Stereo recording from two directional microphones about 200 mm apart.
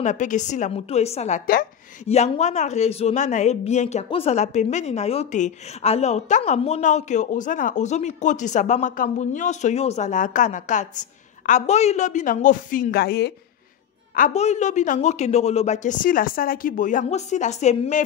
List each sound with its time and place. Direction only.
0.0 s a woman's voice: 40° left (ahead or behind); by 13.3 s 55° left (ahead or behind)
14.1 s a woman's voice: 35° left (ahead or behind)